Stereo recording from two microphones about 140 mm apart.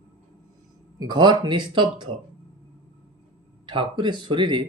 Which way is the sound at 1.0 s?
30° right (ahead or behind).